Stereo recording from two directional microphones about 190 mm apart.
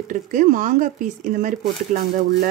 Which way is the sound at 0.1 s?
45° right (ahead or behind).